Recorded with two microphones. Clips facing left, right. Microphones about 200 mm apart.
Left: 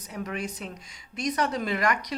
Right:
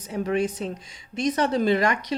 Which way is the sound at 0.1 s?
30° right (ahead or behind).